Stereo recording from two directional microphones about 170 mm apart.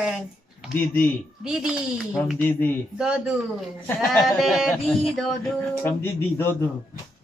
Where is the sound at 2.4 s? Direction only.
10° left (ahead or behind).